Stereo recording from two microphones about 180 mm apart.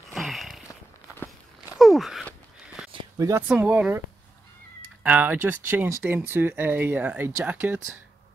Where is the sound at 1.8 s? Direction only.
Centre (ahead or behind).